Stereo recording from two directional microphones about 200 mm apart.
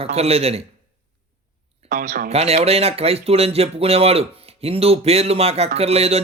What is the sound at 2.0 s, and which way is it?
Speech, 50° right (ahead or behind).